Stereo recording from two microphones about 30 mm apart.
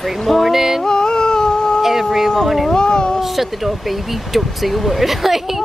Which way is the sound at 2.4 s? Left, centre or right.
Centre.